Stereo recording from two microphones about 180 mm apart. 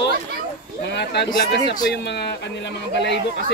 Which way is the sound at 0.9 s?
70° left (ahead or behind).